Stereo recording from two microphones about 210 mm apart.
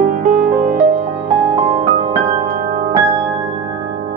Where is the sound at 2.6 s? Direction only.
40° right (ahead or behind).